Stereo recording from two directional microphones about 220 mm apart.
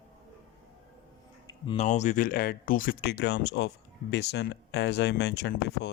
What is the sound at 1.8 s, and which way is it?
Speech, 30° left (ahead or behind).